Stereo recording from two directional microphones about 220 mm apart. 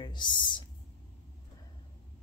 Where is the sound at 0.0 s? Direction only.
20° left (ahead or behind).